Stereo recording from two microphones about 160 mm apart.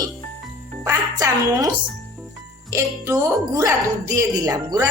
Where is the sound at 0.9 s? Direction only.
20° right (ahead or behind).